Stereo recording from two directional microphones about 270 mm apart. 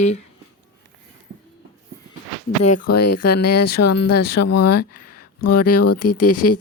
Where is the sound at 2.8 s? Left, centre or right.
Left.